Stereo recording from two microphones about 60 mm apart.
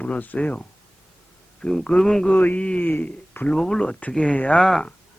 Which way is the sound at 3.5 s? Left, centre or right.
Centre.